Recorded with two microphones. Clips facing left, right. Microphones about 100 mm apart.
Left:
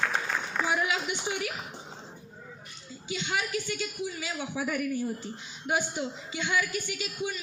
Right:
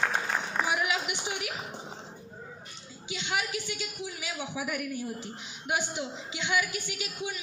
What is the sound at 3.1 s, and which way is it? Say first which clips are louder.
A man's voice: left 1 dB; 15° right (ahead or behind).